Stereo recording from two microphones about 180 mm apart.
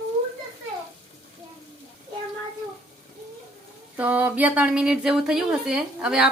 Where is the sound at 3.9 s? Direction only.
10° right (ahead or behind).